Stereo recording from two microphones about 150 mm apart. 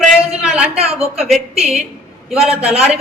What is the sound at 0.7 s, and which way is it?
Speech, 40° right (ahead or behind).